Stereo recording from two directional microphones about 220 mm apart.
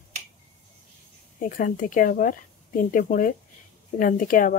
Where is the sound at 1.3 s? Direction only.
40° left (ahead or behind).